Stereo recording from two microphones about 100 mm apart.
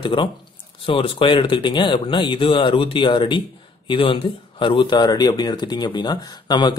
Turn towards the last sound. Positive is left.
turn(degrees=45)  # may be behind; listen again after turning